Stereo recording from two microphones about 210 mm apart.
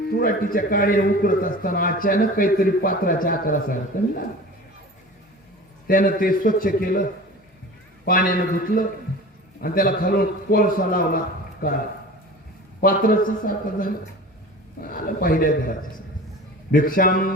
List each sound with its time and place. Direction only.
0.1 s a man's voice: 45° left (ahead or behind)
5.9 s a man's voice: 40° left (ahead or behind)
12.8 s a man's voice: 40° left (ahead or behind)
16.7 s a man's voice: 40° left (ahead or behind)